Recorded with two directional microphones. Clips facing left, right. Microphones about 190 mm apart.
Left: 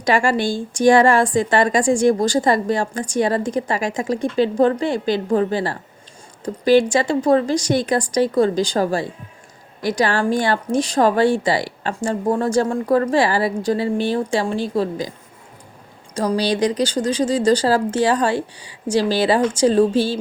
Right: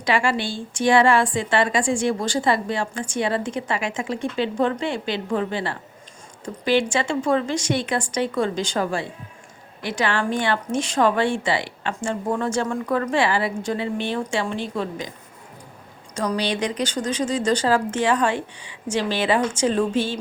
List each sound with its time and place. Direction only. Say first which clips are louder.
0.0 s a woman's voice: left 4 dB; 45° left (ahead or behind)
16.1 s a woman's voice: left 4 dB; 35° left (ahead or behind)